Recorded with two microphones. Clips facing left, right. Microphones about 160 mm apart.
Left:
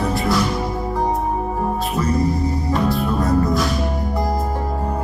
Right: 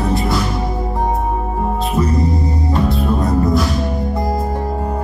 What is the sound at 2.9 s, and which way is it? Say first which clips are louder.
Music: right 1 dB; 20° right (ahead or behind).